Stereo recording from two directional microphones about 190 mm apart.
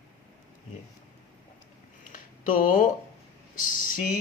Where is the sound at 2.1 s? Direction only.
45° left (ahead or behind).